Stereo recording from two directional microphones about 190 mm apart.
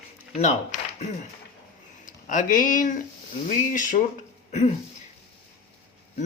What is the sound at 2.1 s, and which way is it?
Speech, 45° left (ahead or behind).